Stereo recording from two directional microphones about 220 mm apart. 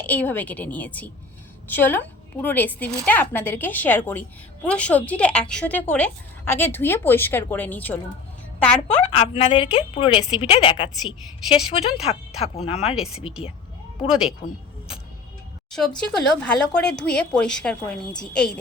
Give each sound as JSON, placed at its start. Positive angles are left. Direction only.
{"t": 0.0, "sound": "a woman's voice", "side_deg": 5}
{"t": 9.1, "sound": "speech", "side_deg": 25}
{"t": 14.1, "sound": "speech", "side_deg": -5}
{"t": 16.0, "sound": "speech", "side_deg": 5}